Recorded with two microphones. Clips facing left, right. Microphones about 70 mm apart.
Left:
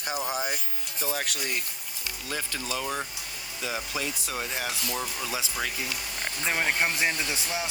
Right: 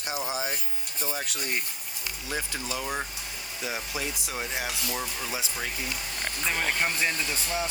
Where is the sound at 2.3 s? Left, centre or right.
Left.